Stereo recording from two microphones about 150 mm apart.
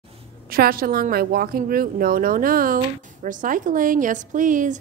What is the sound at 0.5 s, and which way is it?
A woman's voice, 85° right.